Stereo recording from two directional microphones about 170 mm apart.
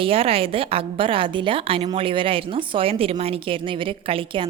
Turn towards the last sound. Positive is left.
turn(degrees=-30)  # may be behind; listen again after turning